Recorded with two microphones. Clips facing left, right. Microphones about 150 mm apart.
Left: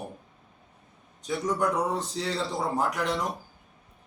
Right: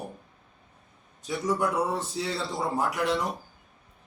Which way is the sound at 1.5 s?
10° right (ahead or behind).